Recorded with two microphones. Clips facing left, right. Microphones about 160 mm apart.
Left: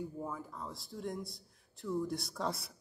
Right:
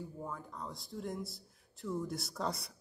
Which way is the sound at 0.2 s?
5° left (ahead or behind).